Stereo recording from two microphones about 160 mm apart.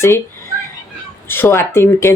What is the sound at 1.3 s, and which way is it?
Speech, 15° left (ahead or behind).